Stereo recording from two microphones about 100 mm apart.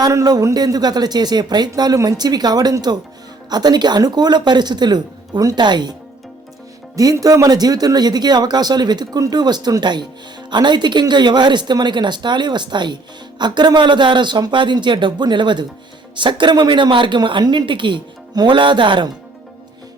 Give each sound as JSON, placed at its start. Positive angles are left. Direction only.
{"t": 0.0, "sound": "speech", "side_deg": -40}
{"t": 6.9, "sound": "speech", "side_deg": -35}